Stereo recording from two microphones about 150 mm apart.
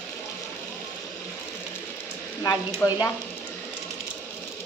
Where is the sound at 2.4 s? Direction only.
20° left (ahead or behind).